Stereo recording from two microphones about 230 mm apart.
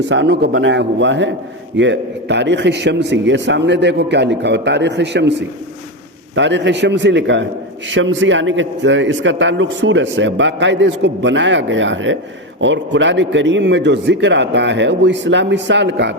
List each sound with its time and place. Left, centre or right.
0.1 s a man's voice: right
6.3 s a man's voice: right